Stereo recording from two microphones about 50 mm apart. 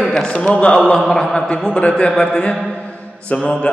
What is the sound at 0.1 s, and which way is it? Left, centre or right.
A man's voice, centre.